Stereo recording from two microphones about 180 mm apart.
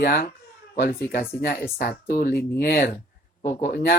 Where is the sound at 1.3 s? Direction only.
60° left (ahead or behind).